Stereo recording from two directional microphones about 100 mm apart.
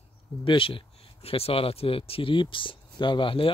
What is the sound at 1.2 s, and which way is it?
Speech, 75° left (ahead or behind).